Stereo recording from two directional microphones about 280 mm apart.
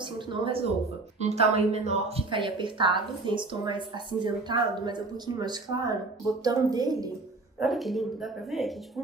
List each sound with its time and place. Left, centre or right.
0.0 s speech: centre
7.6 s speech: centre